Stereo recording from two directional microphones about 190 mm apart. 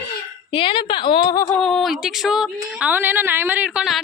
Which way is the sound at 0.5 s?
25° left (ahead or behind).